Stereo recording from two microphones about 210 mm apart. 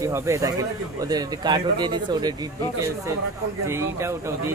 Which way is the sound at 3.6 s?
10° right (ahead or behind).